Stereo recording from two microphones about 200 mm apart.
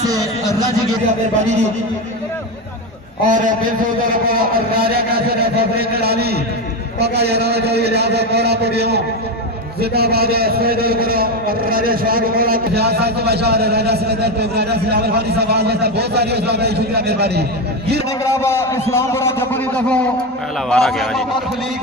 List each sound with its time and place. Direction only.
3.3 s a man's voice: 40° right (ahead or behind)
18.2 s a man's voice: 15° left (ahead or behind)